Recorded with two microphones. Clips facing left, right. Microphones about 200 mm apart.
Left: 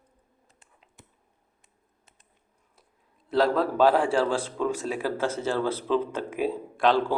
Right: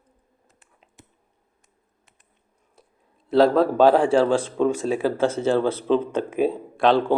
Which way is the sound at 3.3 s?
25° right (ahead or behind).